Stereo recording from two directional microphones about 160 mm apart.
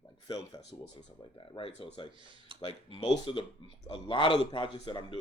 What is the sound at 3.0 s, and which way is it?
Speech, 30° left (ahead or behind).